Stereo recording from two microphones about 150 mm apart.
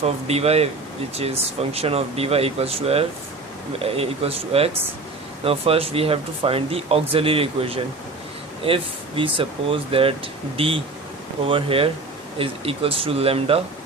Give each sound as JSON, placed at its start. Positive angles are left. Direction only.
{"t": 0.0, "sound": "speech", "side_deg": -45}